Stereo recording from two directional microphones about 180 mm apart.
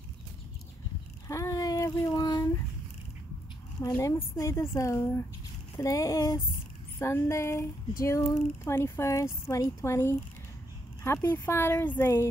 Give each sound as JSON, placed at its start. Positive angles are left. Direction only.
{"t": 1.2, "sound": "child singing", "side_deg": 15}
{"t": 3.8, "sound": "speech", "side_deg": 20}